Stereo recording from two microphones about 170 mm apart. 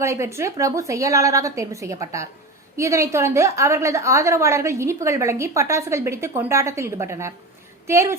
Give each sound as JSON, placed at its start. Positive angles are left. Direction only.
{"t": 0.0, "sound": "a woman's voice", "side_deg": -15}